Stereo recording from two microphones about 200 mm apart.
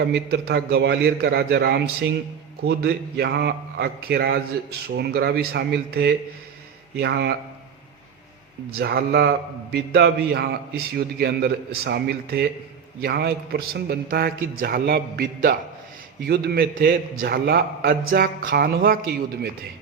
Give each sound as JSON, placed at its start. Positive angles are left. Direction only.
{"t": 0.1, "sound": "a man's voice", "side_deg": -55}
{"t": 8.7, "sound": "a man's voice", "side_deg": -55}